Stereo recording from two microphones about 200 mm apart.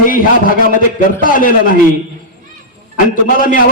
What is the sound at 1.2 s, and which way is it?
Speech, 45° left (ahead or behind).